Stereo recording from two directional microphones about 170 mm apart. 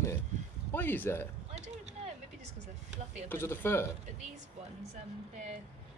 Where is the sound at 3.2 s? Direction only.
15° left (ahead or behind).